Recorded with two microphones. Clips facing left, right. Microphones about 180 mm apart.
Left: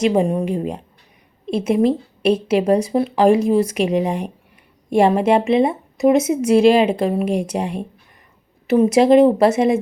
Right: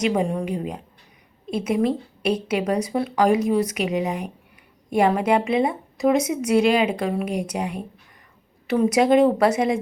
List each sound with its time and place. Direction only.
0.0 s a woman's voice: 25° left (ahead or behind)